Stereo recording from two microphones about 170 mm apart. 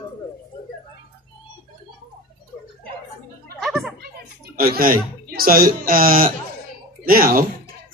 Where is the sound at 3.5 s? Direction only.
Centre (ahead or behind).